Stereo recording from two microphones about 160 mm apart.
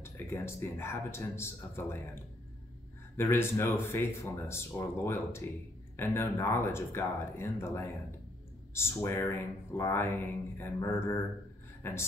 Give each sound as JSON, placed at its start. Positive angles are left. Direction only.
{"t": 0.0, "sound": "a man's voice", "side_deg": 15}
{"t": 3.2, "sound": "a man's voice", "side_deg": 15}